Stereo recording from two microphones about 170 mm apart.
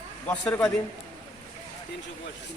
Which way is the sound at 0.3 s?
10° left (ahead or behind).